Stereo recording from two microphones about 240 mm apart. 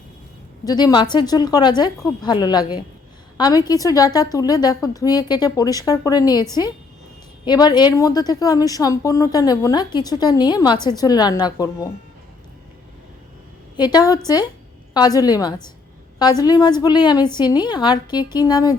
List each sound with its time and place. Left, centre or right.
0.6 s a woman's voice: centre
13.7 s a woman's voice: centre